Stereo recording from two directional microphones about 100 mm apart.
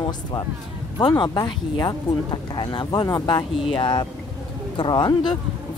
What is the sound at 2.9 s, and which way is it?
Speech, 35° left (ahead or behind).